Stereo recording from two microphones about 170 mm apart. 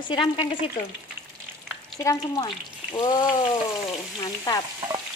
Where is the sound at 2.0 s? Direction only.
20° left (ahead or behind).